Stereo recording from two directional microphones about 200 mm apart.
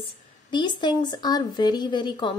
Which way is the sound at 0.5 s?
20° left (ahead or behind).